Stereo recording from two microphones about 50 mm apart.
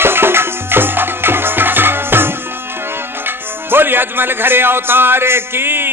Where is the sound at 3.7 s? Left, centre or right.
Right.